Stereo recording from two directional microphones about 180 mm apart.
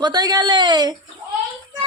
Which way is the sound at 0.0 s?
20° right (ahead or behind).